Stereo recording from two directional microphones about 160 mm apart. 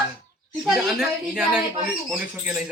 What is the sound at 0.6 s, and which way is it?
Speech, centre (ahead or behind).